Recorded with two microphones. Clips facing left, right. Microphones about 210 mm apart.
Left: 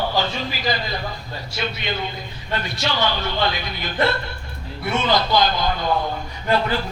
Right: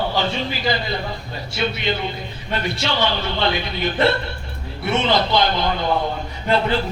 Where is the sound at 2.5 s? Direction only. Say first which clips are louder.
Right 2 dB; 25° right (ahead or behind).